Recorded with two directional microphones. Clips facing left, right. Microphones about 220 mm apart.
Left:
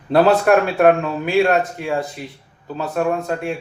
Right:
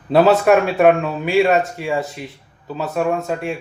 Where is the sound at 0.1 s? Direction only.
Centre (ahead or behind).